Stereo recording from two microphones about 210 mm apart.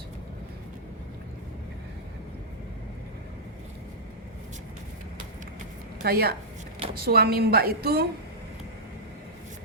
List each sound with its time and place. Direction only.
6.0 s a woman's voice: 45° right (ahead or behind)